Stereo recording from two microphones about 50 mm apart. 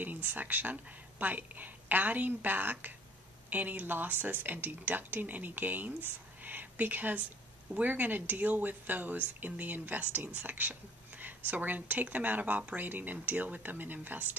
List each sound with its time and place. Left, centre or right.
0.0 s speech: right